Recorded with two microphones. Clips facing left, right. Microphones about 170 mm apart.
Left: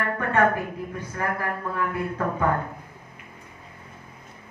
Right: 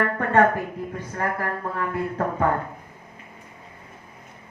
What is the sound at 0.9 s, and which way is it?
Speech, 35° right (ahead or behind).